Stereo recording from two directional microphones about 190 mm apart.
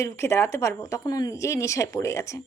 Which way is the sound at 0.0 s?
15° left (ahead or behind).